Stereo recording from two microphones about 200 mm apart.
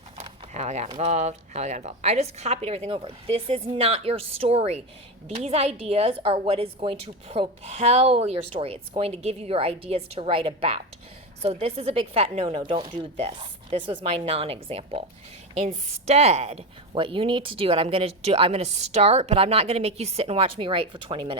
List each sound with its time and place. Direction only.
0.2 s a woman's voice: 35° right (ahead or behind)